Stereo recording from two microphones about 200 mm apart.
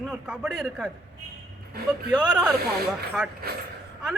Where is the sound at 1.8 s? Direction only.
50° right (ahead or behind).